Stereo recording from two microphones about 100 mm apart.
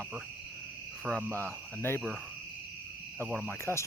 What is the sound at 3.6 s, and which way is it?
Speech, 30° left (ahead or behind).